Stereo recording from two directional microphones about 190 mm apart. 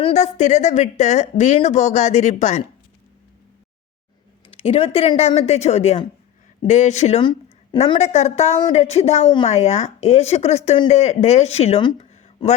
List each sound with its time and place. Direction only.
0.0 s speech: 35° left (ahead or behind)
4.4 s speech: 30° left (ahead or behind)